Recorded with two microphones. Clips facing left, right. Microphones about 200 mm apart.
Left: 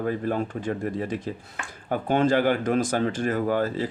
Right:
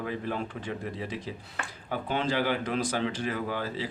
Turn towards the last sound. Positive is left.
turn(degrees=45)  # may be behind; listen again after turning